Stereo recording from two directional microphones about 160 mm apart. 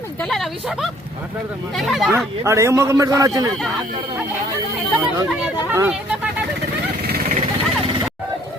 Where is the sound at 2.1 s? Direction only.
15° right (ahead or behind).